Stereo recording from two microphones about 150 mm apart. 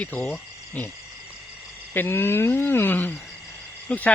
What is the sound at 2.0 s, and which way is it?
Speech, 15° left (ahead or behind).